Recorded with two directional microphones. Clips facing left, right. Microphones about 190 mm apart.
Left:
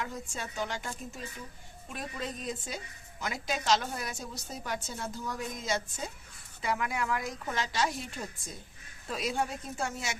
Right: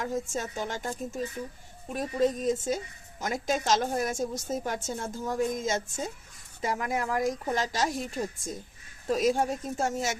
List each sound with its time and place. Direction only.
0.0 s a woman's voice: 45° right (ahead or behind)